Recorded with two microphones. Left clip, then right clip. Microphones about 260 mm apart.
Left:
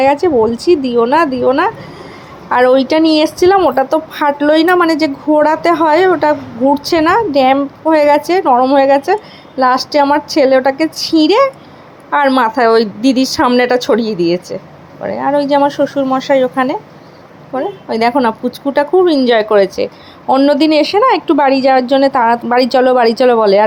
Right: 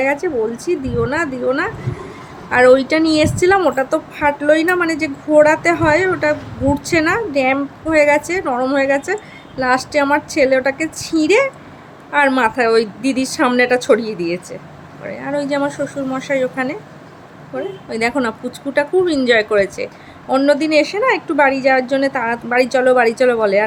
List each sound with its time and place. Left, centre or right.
0.0 s a woman's voice: centre